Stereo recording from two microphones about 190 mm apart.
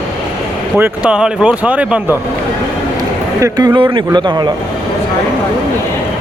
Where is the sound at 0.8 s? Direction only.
5° right (ahead or behind).